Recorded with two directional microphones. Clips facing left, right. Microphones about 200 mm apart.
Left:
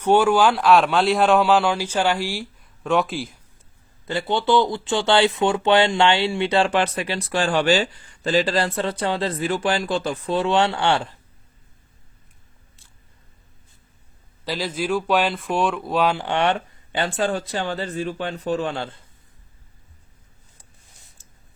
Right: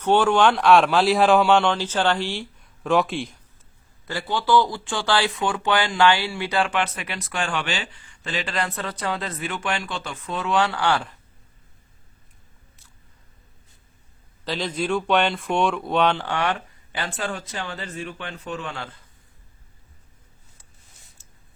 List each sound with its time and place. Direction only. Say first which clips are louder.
0.0 s speech: left 1 dB; 10° left (ahead or behind)
4.0 s speech: left 4 dB; 25° left (ahead or behind)
14.4 s speech: left 1 dB; 5° left (ahead or behind)
16.2 s speech: left 4 dB; 25° left (ahead or behind)